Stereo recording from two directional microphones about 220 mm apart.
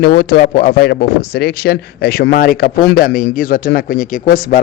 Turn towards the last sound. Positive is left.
turn(degrees=40)  # may be behind; listen again after turning